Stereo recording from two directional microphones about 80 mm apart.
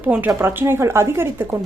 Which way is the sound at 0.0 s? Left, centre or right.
Right.